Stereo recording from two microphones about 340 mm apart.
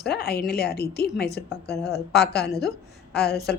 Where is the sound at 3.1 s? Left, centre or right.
Left.